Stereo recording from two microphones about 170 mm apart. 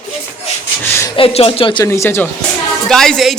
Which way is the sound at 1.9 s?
15° left (ahead or behind).